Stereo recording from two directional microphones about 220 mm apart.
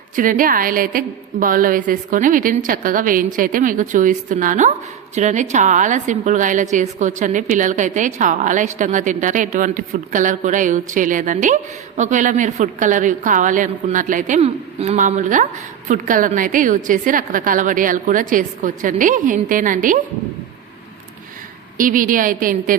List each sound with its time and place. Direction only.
0.2 s a woman's voice: 40° right (ahead or behind)
21.8 s a woman's voice: 40° right (ahead or behind)